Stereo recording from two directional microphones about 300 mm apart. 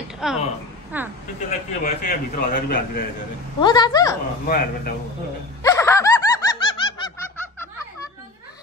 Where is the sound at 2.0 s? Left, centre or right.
Left.